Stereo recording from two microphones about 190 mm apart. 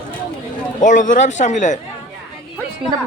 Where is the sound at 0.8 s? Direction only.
40° left (ahead or behind).